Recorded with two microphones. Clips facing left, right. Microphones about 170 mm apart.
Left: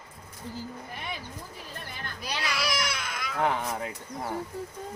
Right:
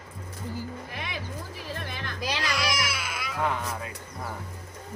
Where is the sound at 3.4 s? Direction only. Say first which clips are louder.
Left 2 dB; 25° left (ahead or behind).